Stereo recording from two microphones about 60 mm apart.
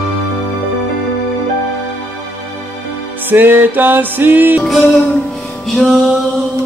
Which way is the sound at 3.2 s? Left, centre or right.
Right.